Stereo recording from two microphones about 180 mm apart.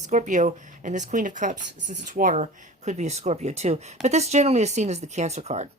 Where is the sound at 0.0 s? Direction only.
40° right (ahead or behind).